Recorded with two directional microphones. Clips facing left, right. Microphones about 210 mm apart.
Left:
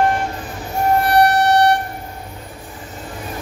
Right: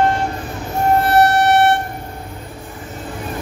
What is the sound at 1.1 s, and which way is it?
Music, 20° right (ahead or behind).